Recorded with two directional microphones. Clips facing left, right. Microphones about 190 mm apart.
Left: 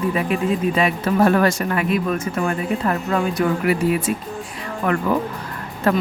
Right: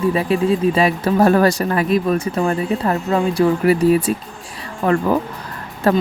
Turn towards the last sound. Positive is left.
turn(degrees=-35)  # may be behind; listen again after turning